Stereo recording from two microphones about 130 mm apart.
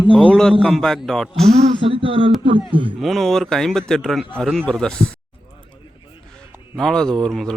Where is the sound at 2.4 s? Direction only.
40° right (ahead or behind).